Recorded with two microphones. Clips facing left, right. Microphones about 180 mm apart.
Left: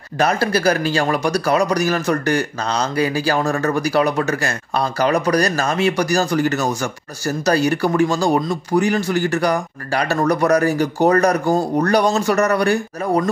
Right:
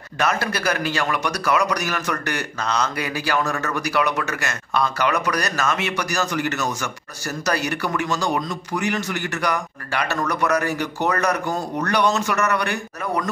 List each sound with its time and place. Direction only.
0.2 s speech: 35° left (ahead or behind)